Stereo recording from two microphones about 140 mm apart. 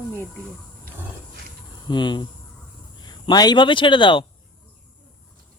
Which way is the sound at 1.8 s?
35° left (ahead or behind).